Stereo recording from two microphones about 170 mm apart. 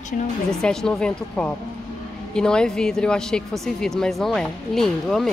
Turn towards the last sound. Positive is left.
turn(degrees=0)  # may be behind; listen again after turning